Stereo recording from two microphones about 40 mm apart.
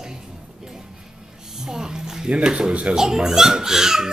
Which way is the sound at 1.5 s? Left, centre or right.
Centre.